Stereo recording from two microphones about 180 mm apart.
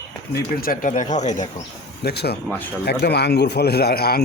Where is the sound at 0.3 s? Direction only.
55° left (ahead or behind).